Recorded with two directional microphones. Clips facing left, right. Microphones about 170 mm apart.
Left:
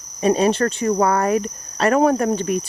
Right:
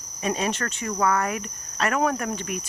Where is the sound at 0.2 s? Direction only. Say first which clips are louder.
Left 10 dB; 35° left (ahead or behind).